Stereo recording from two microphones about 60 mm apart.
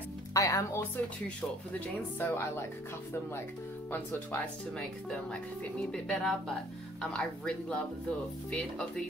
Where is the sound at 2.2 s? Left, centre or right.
Left.